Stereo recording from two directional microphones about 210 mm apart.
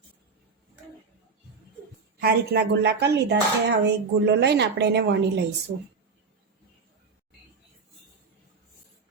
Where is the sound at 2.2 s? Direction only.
50° right (ahead or behind).